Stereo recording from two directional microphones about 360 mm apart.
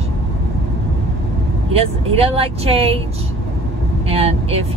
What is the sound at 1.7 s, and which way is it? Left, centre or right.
Speech, centre.